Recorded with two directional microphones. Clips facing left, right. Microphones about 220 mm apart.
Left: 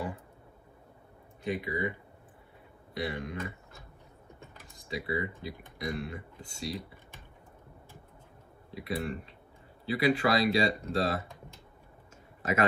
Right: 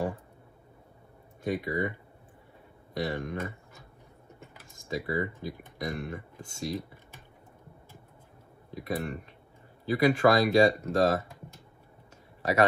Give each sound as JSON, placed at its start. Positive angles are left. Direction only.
{"t": 1.4, "sound": "speech", "side_deg": -45}
{"t": 4.7, "sound": "speech", "side_deg": -45}
{"t": 8.7, "sound": "speech", "side_deg": -45}